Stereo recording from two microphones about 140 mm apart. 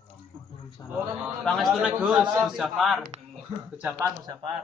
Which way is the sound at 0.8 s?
25° left (ahead or behind).